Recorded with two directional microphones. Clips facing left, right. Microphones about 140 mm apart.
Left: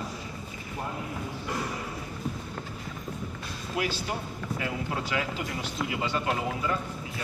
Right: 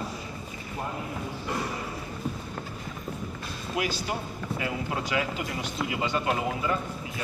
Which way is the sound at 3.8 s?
15° right (ahead or behind).